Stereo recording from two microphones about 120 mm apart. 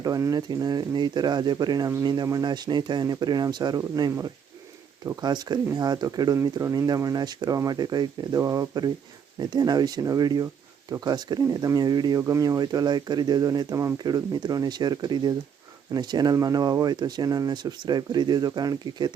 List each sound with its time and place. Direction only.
0.0 s speech: 30° right (ahead or behind)